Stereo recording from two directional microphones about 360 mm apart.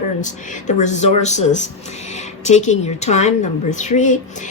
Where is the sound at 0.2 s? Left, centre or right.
Centre.